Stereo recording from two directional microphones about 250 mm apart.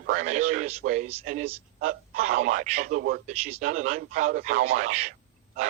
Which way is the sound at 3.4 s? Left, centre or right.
Right.